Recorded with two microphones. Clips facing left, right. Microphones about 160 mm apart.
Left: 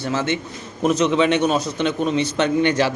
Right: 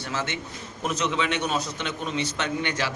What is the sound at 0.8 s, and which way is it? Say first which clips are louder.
A man's voice: left 10 dB; 25° left (ahead or behind).